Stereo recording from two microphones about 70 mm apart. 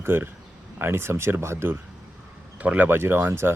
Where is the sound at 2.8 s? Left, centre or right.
Right.